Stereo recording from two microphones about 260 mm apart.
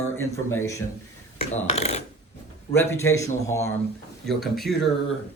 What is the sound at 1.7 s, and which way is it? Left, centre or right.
Speech, left.